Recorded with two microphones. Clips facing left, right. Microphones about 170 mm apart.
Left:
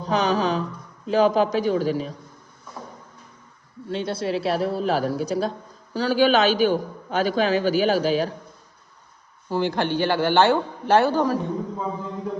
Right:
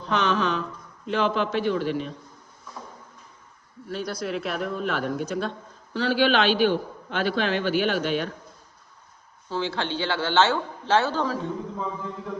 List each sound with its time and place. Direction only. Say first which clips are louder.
0.0 s a woman's voice: left 3 dB; 35° left (ahead or behind)
3.8 s speech: left 4 dB; 25° left (ahead or behind)
9.5 s a man's voice: left 5 dB; 15° left (ahead or behind)